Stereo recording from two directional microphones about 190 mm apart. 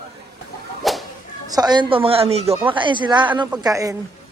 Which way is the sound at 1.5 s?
20° right (ahead or behind).